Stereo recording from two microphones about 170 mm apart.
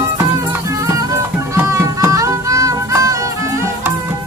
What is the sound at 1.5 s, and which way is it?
Music, 15° right (ahead or behind).